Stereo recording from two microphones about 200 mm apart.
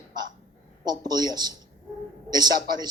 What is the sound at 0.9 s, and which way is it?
A man's voice, 20° right (ahead or behind).